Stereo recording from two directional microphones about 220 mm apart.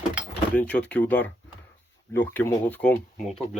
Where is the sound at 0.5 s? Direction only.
5° left (ahead or behind).